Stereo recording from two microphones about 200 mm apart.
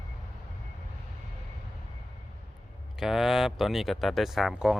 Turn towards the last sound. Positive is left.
turn(degrees=0)  # may be behind; listen again after turning